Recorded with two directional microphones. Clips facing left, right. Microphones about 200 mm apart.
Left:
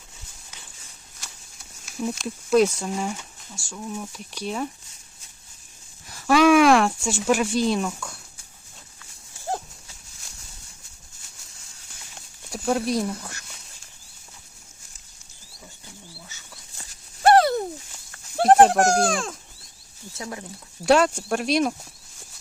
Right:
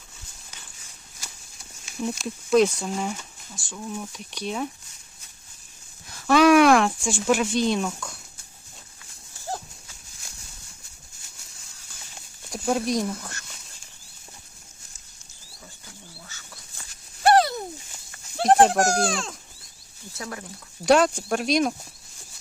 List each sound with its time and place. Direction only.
1.8 s speech: centre (ahead or behind)
6.1 s a sound: 10° left (ahead or behind)
12.5 s speech: 5° right (ahead or behind)
17.2 s a sound: 55° left (ahead or behind)
18.9 s speech: 50° left (ahead or behind)
20.1 s speech: 20° left (ahead or behind)
20.8 s speech: 5° left (ahead or behind)